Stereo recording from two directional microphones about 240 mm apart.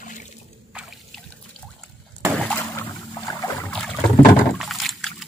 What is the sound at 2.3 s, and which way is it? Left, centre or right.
Boat, centre.